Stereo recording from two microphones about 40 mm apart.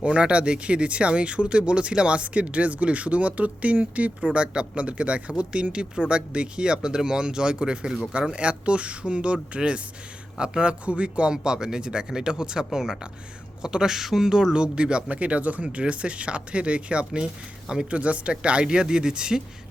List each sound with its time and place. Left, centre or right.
0.0 s speech: right
4.4 s speech: right
15.1 s speech: right; by 19.4 s centre